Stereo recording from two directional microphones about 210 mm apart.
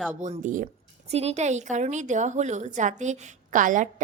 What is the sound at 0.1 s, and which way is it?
A woman's voice, 35° right (ahead or behind).